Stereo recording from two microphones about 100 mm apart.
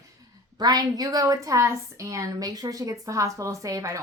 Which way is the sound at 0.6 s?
40° right (ahead or behind).